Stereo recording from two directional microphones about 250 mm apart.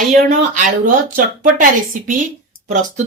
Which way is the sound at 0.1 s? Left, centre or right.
Right.